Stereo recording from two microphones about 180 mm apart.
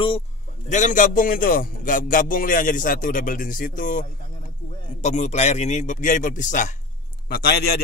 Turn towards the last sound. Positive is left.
turn(degrees=60)  # may be behind; listen again after turning